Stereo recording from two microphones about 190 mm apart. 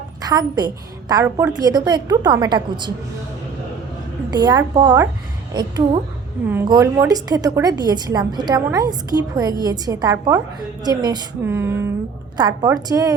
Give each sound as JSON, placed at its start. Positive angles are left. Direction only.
{"t": 0.2, "sound": "a woman's voice", "side_deg": -20}
{"t": 1.2, "sound": "a woman's voice", "side_deg": -10}
{"t": 1.5, "sound": "a woman's voice", "side_deg": -20}
{"t": 4.3, "sound": "a woman's voice", "side_deg": -20}